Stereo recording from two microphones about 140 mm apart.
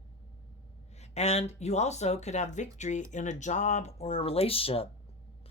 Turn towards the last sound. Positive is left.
turn(degrees=45)  # may be behind; listen again after turning